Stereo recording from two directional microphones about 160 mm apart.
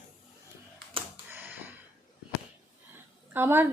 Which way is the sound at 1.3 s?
10° right (ahead or behind).